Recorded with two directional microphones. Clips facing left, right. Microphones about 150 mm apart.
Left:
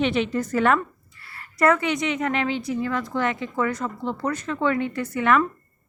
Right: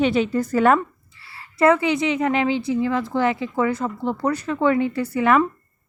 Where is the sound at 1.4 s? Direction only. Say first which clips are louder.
Right 3 dB; 25° right (ahead or behind).